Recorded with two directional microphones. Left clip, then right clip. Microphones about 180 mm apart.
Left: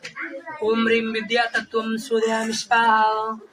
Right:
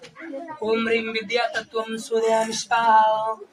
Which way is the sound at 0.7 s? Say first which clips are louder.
Left 2 dB; 20° right (ahead or behind).